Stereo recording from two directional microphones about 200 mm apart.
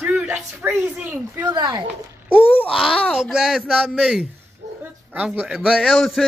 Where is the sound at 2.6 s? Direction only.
Centre (ahead or behind).